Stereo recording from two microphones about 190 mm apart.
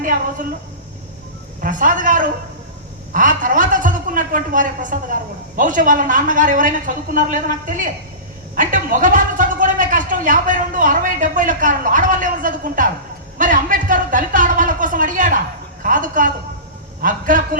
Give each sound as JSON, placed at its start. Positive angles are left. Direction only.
{"t": 0.0, "sound": "a woman's voice", "side_deg": -45}
{"t": 1.6, "sound": "a woman's voice", "side_deg": -45}
{"t": 13.4, "sound": "a sound", "side_deg": -45}
{"t": 15.8, "sound": "a woman's voice", "side_deg": -45}